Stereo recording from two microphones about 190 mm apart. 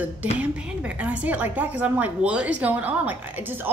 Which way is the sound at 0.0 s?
10° right (ahead or behind).